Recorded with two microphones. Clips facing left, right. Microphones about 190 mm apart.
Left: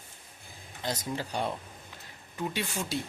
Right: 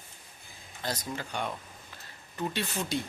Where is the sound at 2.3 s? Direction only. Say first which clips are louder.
Even; 10° left (ahead or behind).